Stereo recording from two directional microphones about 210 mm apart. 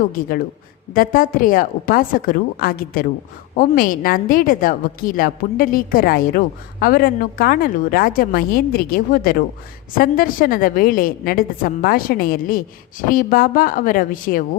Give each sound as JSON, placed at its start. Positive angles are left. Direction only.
{"t": 0.1, "sound": "a woman's voice", "side_deg": 45}